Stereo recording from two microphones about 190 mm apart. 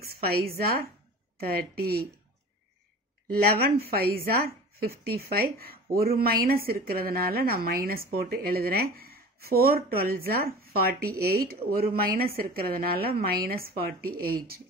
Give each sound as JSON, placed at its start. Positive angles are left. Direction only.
{"t": 0.0, "sound": "a woman's voice", "side_deg": -55}
{"t": 3.3, "sound": "a woman's voice", "side_deg": -55}